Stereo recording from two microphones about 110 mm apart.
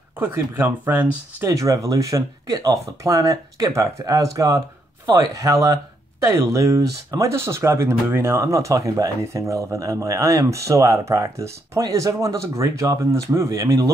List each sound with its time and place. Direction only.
0.2 s speech: 20° right (ahead or behind)
1.4 s speech: 30° right (ahead or behind)